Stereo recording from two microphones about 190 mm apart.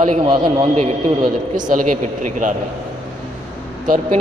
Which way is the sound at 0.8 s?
40° right (ahead or behind).